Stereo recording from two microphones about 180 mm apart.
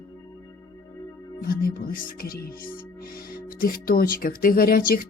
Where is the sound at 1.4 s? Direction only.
55° left (ahead or behind).